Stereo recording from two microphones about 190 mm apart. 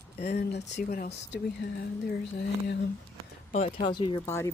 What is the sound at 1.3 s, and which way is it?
Speech, 60° left (ahead or behind).